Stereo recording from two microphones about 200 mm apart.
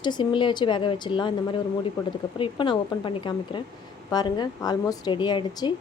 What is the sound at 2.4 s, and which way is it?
A woman's voice, 25° left (ahead or behind).